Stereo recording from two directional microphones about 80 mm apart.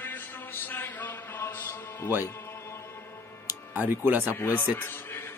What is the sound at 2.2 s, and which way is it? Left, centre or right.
Music, left.